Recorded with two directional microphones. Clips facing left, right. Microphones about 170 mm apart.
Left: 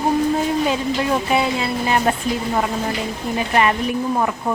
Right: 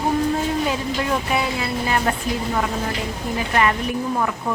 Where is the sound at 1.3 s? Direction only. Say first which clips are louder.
Left 3 dB; 25° left (ahead or behind).